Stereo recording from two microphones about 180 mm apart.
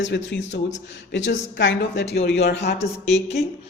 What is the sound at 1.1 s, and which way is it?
A woman's voice, 90° left.